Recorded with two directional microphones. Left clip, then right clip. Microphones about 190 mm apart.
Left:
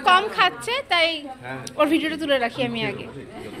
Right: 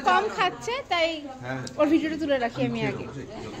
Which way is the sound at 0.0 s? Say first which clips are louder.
Left 5 dB; centre (ahead or behind).